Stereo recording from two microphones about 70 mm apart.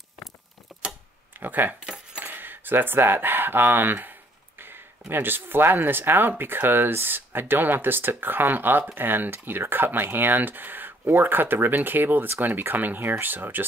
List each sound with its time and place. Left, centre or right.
1.4 s speech: right
2.2 s coin: right
5.1 s speech: right